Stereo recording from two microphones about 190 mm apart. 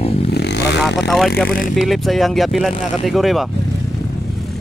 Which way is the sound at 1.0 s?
Centre (ahead or behind).